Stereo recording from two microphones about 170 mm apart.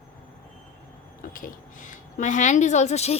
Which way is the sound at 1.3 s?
50° left (ahead or behind).